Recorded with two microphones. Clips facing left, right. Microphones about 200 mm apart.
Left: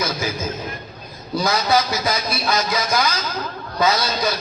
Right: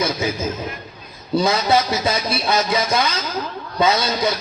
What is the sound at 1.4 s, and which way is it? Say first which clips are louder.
A man's voice: right 2 dB; 25° right (ahead or behind).